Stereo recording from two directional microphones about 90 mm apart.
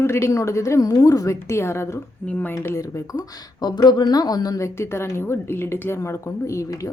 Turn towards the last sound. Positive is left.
turn(degrees=35)  # may be behind; listen again after turning